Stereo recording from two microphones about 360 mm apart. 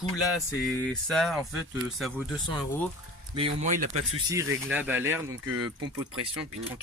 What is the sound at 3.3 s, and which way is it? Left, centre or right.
Speech, centre.